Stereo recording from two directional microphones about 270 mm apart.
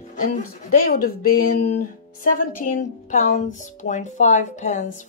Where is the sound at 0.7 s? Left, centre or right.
Left.